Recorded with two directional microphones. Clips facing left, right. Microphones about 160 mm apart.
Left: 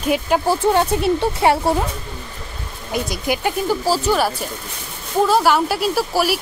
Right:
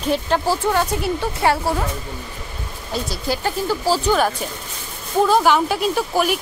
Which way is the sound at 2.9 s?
15° left (ahead or behind).